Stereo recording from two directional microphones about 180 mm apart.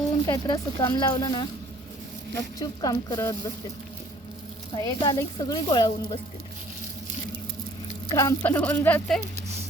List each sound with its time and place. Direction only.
0.3 s a woman's voice: 20° left (ahead or behind)
2.6 s a woman's voice: 20° left (ahead or behind)
4.7 s a woman's voice: 25° left (ahead or behind)
8.0 s speech: 20° left (ahead or behind)